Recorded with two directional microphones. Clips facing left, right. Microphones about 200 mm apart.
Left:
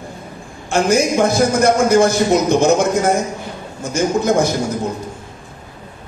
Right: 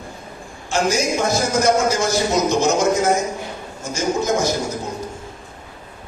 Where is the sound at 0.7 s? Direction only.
55° left (ahead or behind).